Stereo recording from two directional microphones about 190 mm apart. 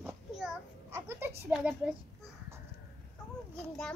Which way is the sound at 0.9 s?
15° right (ahead or behind).